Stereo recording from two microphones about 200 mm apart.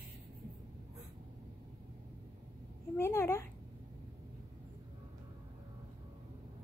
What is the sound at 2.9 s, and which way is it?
Speech, 15° left (ahead or behind).